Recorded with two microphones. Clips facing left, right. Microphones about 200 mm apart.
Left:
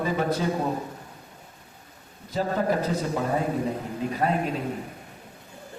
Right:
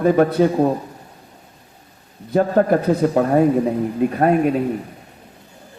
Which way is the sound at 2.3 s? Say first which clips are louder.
Right 9 dB; 60° right (ahead or behind).